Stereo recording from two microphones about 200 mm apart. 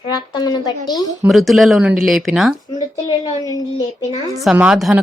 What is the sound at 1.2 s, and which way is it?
Speech, centre (ahead or behind).